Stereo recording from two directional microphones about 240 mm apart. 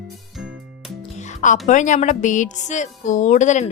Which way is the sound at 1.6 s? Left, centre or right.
Left.